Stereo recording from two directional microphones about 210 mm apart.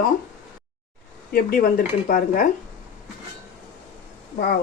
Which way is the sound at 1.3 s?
45° left (ahead or behind).